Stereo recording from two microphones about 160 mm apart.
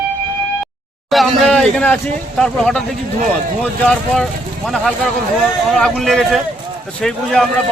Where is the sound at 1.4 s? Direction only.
5° left (ahead or behind).